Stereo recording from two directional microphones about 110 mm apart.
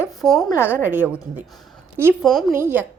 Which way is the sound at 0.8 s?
15° right (ahead or behind).